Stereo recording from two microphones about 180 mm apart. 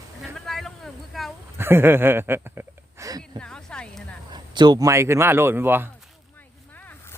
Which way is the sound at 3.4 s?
5° left (ahead or behind).